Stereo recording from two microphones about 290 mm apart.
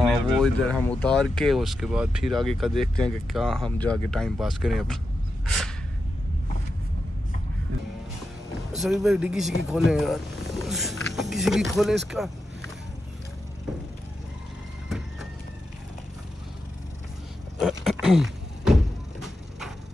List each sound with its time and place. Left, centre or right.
0.0 s speech: centre
8.7 s speech: centre
14.9 s music: centre
17.6 s a sound: centre